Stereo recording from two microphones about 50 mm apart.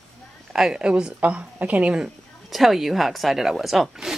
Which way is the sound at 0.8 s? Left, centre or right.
Centre.